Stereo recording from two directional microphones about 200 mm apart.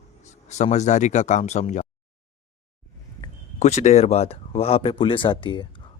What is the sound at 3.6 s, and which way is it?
Speech, 35° left (ahead or behind).